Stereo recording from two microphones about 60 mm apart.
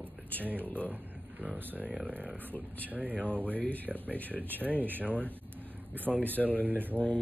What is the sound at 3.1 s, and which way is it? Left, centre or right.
Speech, left.